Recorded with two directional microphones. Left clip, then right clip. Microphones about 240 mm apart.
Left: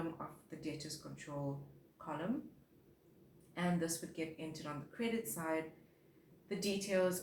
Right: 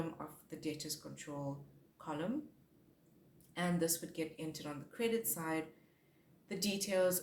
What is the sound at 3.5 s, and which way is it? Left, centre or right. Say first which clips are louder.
Speech: right 2 dB; right.